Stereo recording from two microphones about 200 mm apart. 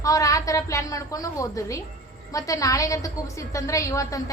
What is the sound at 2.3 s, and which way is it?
A woman's voice, 15° left (ahead or behind).